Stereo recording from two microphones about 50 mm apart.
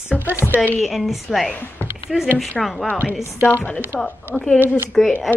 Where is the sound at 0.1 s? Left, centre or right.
Left.